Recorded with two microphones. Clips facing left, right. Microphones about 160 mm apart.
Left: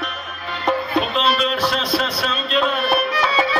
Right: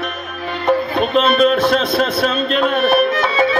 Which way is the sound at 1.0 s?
50° right (ahead or behind).